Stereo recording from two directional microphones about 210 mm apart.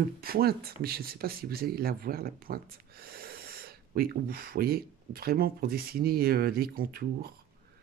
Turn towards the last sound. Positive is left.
turn(degrees=-45)  # may be behind; listen again after turning